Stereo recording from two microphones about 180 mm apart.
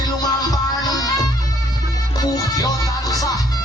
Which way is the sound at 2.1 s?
20° left (ahead or behind).